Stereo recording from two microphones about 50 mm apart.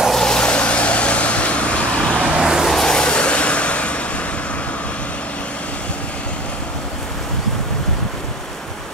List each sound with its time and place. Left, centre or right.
0.2 s vehicle: centre
2.2 s vehicle: centre
2.7 s vehicle: centre